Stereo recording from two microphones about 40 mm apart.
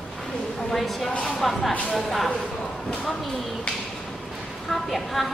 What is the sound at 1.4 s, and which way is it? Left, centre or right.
Speech, centre.